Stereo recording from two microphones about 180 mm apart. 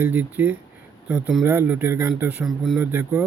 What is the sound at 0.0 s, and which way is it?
Speech, 10° right (ahead or behind).